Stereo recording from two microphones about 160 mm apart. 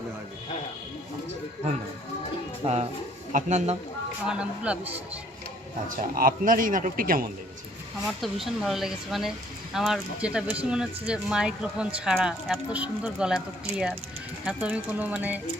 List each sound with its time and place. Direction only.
2.6 s speech: 40° right (ahead or behind)
4.3 s speech: 5° right (ahead or behind)
5.9 s a man's voice: 60° right (ahead or behind)
8.2 s speech: centre (ahead or behind)